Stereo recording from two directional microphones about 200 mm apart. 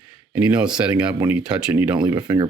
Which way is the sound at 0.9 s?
15° right (ahead or behind).